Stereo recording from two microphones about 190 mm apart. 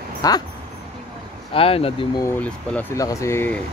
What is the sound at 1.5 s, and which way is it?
Speech, 30° left (ahead or behind).